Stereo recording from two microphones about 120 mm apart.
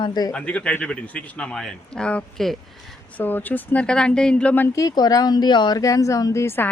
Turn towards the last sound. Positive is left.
turn(degrees=20)  # may be behind; listen again after turning